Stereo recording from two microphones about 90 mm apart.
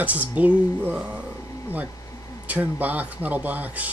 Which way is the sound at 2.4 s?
20° right (ahead or behind).